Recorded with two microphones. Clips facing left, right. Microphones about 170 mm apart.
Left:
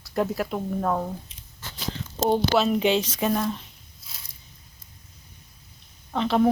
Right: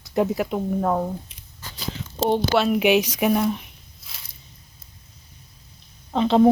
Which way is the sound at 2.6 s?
10° right (ahead or behind).